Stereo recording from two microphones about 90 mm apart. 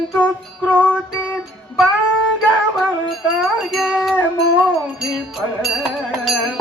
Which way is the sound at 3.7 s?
Centre (ahead or behind).